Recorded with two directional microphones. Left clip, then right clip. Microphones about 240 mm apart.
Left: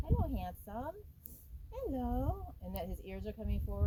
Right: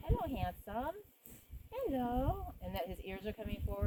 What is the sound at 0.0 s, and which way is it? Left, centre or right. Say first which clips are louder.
Speech: right 2 dB; centre.